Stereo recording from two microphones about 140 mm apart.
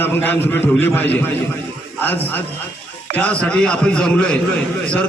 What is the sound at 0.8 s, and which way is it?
Speech, 15° left (ahead or behind).